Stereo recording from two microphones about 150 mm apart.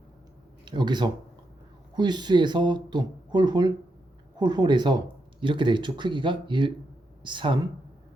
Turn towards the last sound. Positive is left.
turn(degrees=-30)  # may be behind; listen again after turning